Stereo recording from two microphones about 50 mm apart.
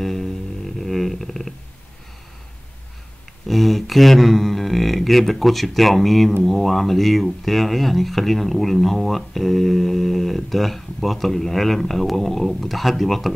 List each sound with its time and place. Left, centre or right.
0.0 s music: centre
0.7 s a sound: centre
3.4 s speech: centre